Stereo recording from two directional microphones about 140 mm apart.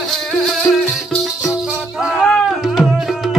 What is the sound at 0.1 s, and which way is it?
Music, centre (ahead or behind).